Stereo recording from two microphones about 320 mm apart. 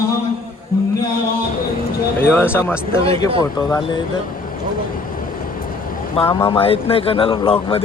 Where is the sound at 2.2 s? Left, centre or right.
Centre.